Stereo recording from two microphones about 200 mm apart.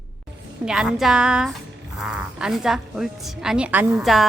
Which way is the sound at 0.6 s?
5° right (ahead or behind).